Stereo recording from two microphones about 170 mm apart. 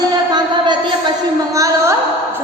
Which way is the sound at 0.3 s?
25° right (ahead or behind).